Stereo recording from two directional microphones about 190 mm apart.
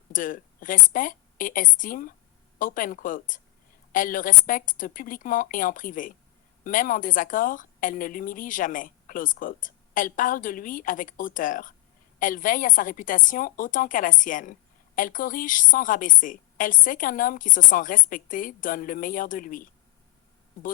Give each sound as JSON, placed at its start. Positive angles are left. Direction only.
{"t": 0.1, "sound": "a woman's voice", "side_deg": 45}